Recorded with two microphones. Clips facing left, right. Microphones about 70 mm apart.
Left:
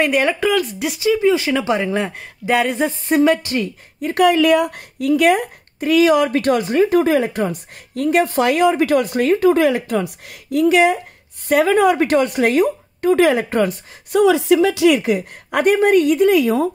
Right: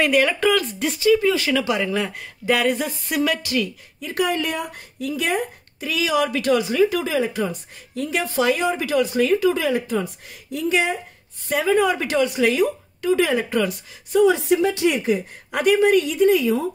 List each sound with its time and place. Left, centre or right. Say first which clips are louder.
0.0 s speech: left 2 dB; left
0.4 s speech: left 2 dB; centre; by 3.6 s left
4.0 s speech: left 9 dB; left
14.1 s a woman's voice: left 3 dB; left
15.6 s speech: left 3 dB; left